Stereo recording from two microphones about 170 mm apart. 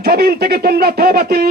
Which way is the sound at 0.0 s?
65° right (ahead or behind).